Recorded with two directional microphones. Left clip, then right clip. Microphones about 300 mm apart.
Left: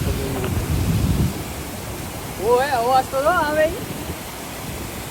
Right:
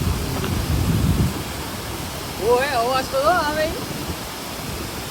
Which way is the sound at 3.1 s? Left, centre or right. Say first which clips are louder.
Left 1 dB; left.